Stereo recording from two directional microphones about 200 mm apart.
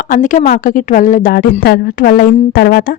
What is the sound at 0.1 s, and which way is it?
A woman's voice, 40° left (ahead or behind).